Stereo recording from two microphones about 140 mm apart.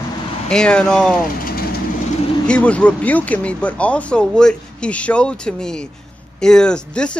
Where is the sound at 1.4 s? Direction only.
90° left.